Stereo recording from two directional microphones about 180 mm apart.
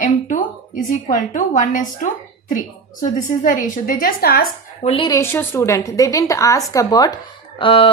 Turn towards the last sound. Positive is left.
turn(degrees=30)  # may be behind; listen again after turning